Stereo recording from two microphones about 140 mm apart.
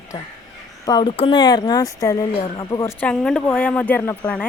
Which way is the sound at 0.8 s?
30° left (ahead or behind).